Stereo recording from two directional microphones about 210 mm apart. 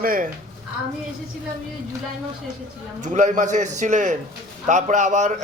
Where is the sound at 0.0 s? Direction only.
40° right (ahead or behind).